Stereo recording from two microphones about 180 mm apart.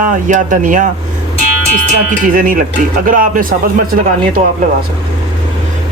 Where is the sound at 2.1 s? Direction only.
50° right (ahead or behind).